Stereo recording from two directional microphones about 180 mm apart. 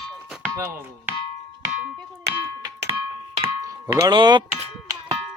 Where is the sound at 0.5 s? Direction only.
15° right (ahead or behind).